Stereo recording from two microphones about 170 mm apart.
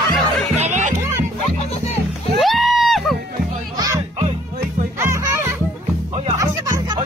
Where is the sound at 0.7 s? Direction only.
45° right (ahead or behind).